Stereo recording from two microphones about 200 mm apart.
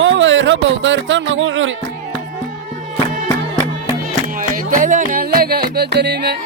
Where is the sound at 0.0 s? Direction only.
70° right (ahead or behind).